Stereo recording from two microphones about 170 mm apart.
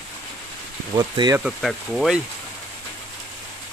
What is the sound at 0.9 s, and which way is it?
Speech, 25° right (ahead or behind).